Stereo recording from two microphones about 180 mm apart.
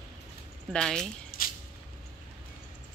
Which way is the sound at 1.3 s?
55° left (ahead or behind).